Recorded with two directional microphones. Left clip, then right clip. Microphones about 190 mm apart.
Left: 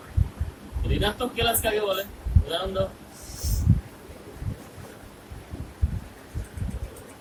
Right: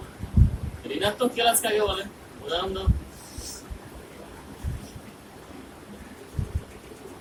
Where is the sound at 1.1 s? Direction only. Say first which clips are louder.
Right 3 dB; 10° left (ahead or behind).